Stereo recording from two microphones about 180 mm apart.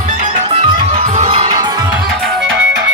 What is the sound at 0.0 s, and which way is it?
Music, 40° right (ahead or behind).